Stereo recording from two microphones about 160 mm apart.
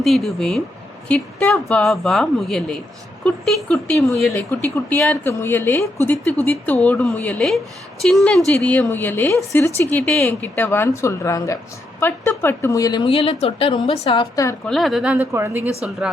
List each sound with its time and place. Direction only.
0.0 s speech: centre (ahead or behind)
5.2 s a woman's voice: 15° left (ahead or behind)
8.5 s a woman's voice: 15° left (ahead or behind)
13.1 s a woman's voice: 35° left (ahead or behind)
14.7 s speech: centre (ahead or behind)